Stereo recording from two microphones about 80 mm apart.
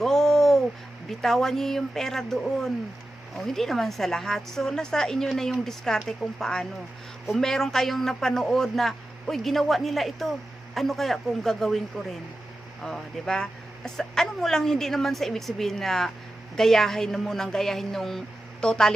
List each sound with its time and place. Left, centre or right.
0.0 s a sound: centre
1.2 s speech: centre
12.8 s speech: centre